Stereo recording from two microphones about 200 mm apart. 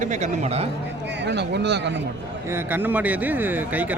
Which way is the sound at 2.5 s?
10° right (ahead or behind).